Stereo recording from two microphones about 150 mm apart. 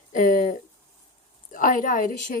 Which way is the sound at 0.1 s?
60° left (ahead or behind).